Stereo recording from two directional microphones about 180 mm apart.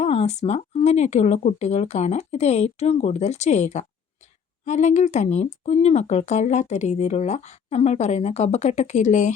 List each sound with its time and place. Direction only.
0.0 s speech: 35° left (ahead or behind)